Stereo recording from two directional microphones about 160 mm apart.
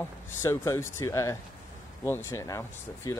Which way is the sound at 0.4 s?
15° left (ahead or behind).